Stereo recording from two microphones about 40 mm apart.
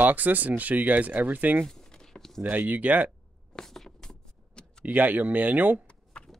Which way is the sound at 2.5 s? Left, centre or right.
Right.